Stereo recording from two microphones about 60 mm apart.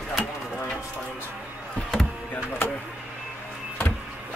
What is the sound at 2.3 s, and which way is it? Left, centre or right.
Speech, left.